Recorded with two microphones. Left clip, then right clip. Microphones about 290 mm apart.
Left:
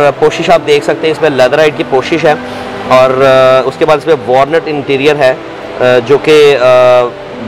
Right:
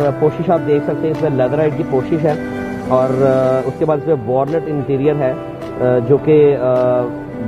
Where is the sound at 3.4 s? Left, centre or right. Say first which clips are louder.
Left 9 dB; centre.